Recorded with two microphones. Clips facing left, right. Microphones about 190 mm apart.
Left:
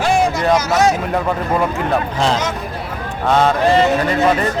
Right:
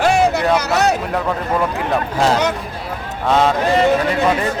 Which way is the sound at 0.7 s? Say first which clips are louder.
Left 2 dB; 65° right (ahead or behind).